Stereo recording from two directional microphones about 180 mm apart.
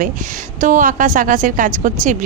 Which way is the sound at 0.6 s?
45° right (ahead or behind).